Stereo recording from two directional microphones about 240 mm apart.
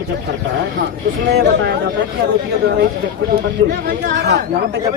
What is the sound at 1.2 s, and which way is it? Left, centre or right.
Speech, right.